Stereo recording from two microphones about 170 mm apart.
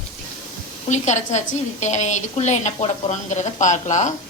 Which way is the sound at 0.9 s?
45° left (ahead or behind).